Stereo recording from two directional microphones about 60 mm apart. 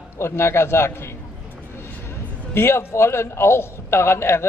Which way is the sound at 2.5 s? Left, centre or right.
Left.